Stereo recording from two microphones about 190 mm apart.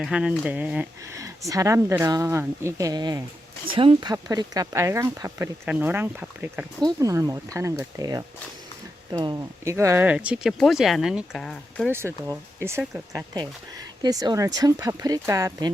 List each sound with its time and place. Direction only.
0.0 s speech: 5° right (ahead or behind)
11.9 s speech: 10° right (ahead or behind)